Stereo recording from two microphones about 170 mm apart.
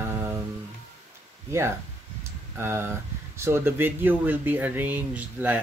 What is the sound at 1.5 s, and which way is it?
Speech, 15° right (ahead or behind).